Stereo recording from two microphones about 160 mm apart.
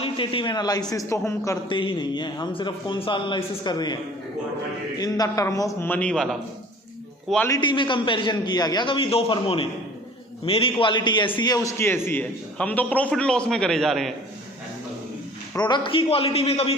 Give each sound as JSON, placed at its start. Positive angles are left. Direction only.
{"t": 0.0, "sound": "a man's voice", "side_deg": 35}
{"t": 1.7, "sound": "a man's voice", "side_deg": 30}
{"t": 4.9, "sound": "a man's voice", "side_deg": 25}
{"t": 7.4, "sound": "a man's voice", "side_deg": 25}
{"t": 15.5, "sound": "a man's voice", "side_deg": 30}